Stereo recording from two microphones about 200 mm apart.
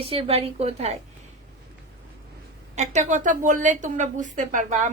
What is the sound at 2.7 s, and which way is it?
A woman's voice, 35° right (ahead or behind).